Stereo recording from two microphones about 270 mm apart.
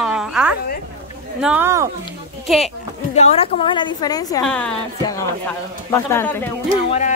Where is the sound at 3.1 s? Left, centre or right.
Left.